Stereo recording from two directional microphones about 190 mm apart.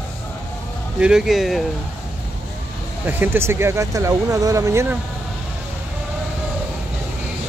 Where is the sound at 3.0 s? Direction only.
10° right (ahead or behind).